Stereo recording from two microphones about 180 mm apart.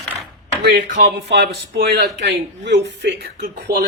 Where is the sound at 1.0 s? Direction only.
65° right (ahead or behind).